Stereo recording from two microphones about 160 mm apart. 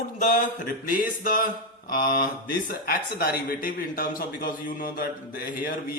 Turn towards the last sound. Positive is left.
turn(degrees=65)  # may be behind; listen again after turning